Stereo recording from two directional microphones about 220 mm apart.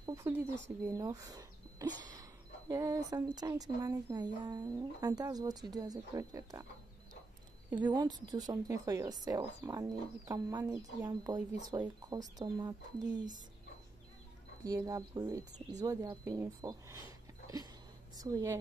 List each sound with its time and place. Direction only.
0.0 s a sound: 15° right (ahead or behind)
0.7 s speech: 15° right (ahead or behind)
7.9 s speech: 20° right (ahead or behind)
14.6 s speech: 15° right (ahead or behind)
18.1 s a woman's voice: 15° right (ahead or behind)